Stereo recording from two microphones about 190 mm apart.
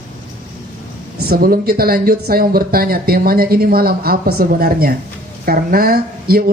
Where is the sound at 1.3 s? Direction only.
55° right (ahead or behind).